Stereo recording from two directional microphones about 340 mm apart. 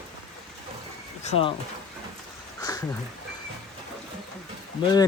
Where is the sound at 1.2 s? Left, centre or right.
Centre.